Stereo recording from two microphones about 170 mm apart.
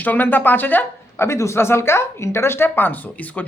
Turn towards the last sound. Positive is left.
turn(degrees=10)  # may be behind; listen again after turning